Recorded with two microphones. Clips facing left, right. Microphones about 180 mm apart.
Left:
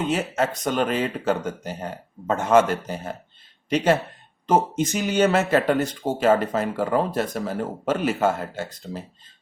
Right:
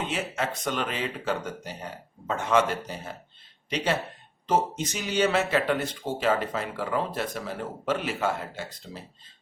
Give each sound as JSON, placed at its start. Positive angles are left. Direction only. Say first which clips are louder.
{"t": 0.3, "sound": "speech", "louder": "left 6 dB", "side_deg": 40}
{"t": 4.4, "sound": "speech", "louder": "left 5 dB", "side_deg": 50}